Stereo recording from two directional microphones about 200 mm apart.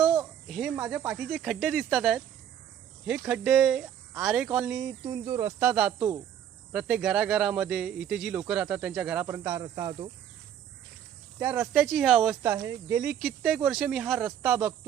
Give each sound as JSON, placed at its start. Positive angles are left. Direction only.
{"t": 0.4, "sound": "speech", "side_deg": 0}
{"t": 11.3, "sound": "speech", "side_deg": -10}
{"t": 11.7, "sound": "speech", "side_deg": 0}
{"t": 13.1, "sound": "speech", "side_deg": 0}